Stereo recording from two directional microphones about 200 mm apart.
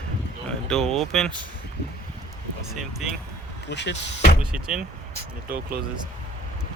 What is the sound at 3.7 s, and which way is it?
Speech, 60° left (ahead or behind).